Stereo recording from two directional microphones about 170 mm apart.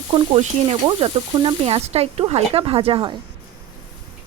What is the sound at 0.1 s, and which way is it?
Speech, 35° right (ahead or behind).